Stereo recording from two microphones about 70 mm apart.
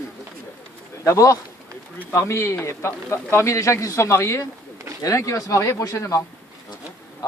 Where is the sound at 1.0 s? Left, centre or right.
Left.